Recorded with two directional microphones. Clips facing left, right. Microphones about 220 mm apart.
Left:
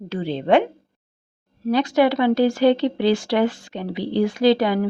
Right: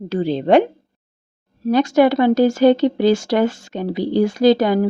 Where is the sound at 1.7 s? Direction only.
45° right (ahead or behind).